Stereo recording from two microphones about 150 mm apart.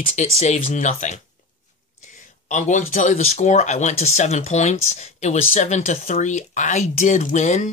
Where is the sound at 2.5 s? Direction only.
55° left (ahead or behind).